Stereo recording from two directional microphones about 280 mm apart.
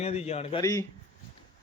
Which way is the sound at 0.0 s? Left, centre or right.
Left.